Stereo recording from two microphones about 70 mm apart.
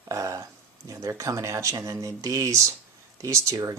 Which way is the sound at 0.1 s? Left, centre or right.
Right.